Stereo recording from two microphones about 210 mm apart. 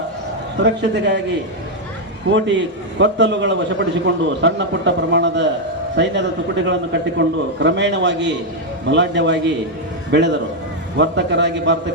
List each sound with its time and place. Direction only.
0.6 s a man's voice: 55° right (ahead or behind)
2.3 s a man's voice: 60° right (ahead or behind)
6.7 s a man's voice: 60° right (ahead or behind)